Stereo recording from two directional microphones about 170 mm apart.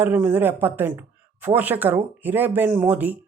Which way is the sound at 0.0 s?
10° right (ahead or behind).